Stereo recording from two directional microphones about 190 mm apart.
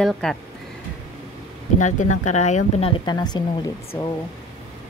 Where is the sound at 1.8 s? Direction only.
40° left (ahead or behind).